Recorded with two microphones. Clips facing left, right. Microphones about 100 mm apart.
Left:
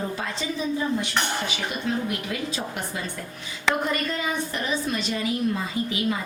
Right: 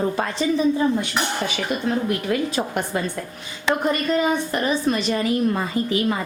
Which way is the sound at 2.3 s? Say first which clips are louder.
Right 8 dB; 55° right (ahead or behind).